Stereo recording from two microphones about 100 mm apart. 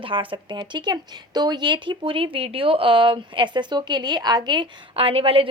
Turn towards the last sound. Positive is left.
turn(degrees=-65)  # may be behind; listen again after turning